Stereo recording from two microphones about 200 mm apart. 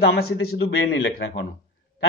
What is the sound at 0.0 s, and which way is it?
Speech, 50° left (ahead or behind).